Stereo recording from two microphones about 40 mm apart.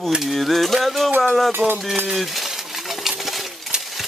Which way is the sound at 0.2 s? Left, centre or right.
Centre.